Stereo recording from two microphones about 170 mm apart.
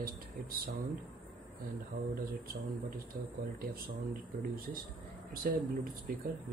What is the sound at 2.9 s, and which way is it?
Speech, 60° right (ahead or behind).